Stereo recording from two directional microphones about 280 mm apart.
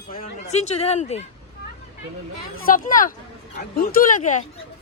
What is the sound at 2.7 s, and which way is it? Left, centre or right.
Speech, left.